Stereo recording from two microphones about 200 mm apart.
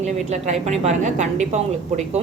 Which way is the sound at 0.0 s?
35° right (ahead or behind).